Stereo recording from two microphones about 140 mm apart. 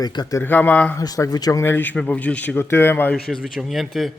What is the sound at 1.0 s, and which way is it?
Speech, 25° left (ahead or behind).